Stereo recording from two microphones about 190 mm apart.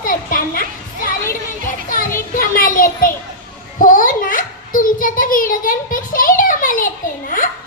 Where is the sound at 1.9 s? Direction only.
45° left (ahead or behind).